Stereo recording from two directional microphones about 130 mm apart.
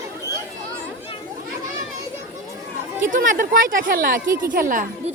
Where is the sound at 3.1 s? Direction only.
90° right.